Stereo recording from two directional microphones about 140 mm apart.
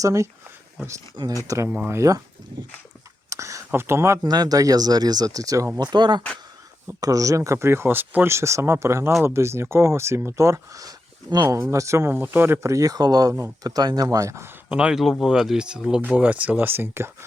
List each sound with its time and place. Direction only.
0.0 s speech: 25° right (ahead or behind)
3.2 s speech: 20° right (ahead or behind)
14.7 s speech: 5° right (ahead or behind)